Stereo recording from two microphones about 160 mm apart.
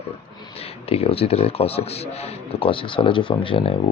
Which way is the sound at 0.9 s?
40° left (ahead or behind).